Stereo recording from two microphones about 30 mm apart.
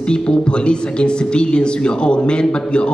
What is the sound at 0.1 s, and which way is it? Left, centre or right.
A man's voice, left.